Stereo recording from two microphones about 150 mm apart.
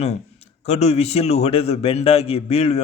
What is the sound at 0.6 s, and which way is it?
A man's voice, 45° left (ahead or behind).